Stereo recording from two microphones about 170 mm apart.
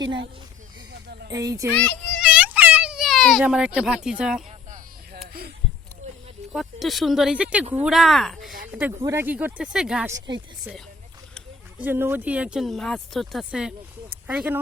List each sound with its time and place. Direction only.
1.3 s a child's voice: 20° right (ahead or behind)
1.7 s a sound: 5° left (ahead or behind)
4.2 s speech: 5° right (ahead or behind)
6.5 s speech: centre (ahead or behind)
9.0 s speech: 15° right (ahead or behind)
10.1 s a child's voice: 25° right (ahead or behind)
11.8 s speech: 10° right (ahead or behind)